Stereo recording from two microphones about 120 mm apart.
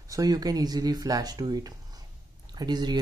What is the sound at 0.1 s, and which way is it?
Speech, 30° right (ahead or behind).